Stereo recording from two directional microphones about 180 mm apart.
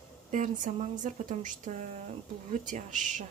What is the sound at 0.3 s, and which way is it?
Speech, 45° right (ahead or behind).